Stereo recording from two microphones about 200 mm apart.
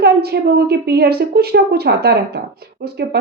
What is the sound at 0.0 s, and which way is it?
A woman's voice, 50° right (ahead or behind).